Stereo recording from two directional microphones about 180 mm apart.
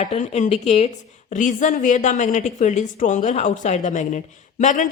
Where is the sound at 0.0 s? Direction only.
35° left (ahead or behind).